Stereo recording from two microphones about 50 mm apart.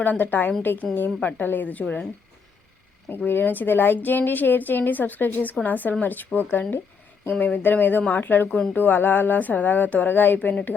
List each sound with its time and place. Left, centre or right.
0.0 s a woman's voice: left
3.2 s a woman's voice: left